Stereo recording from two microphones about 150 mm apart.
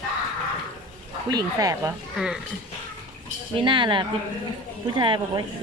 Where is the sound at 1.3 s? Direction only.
25° right (ahead or behind).